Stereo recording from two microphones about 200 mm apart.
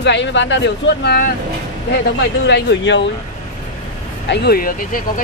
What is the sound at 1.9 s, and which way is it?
Speech, 60° left (ahead or behind).